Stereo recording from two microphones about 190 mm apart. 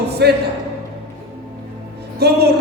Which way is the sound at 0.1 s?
60° right (ahead or behind).